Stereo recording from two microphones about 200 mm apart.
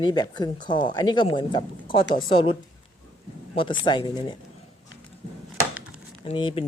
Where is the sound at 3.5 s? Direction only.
25° left (ahead or behind).